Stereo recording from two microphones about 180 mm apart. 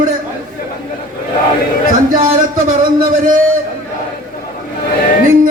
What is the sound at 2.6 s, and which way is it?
Music, 50° right (ahead or behind).